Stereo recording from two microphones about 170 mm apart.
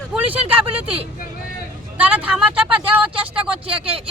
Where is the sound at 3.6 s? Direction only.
35° right (ahead or behind).